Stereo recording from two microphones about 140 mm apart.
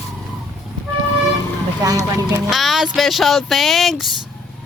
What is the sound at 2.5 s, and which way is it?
Speech, centre (ahead or behind).